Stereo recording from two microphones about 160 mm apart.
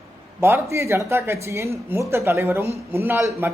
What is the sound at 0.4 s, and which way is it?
Speech, 15° right (ahead or behind).